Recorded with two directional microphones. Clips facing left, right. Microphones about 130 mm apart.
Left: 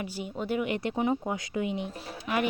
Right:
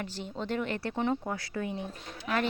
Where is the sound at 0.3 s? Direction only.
10° left (ahead or behind).